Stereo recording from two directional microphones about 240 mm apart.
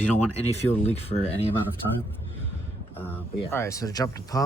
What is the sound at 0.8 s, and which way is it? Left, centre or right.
Speech, left.